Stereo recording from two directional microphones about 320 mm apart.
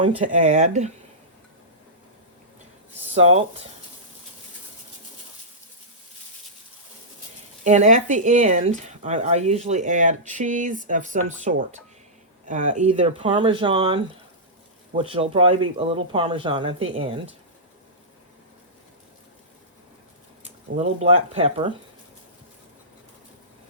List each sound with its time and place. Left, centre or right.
0.3 s speech: right
3.2 s speech: centre
7.6 s speech: right
20.4 s speech: centre